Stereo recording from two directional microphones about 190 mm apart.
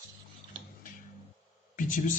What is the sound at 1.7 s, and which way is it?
Speech, 45° left (ahead or behind).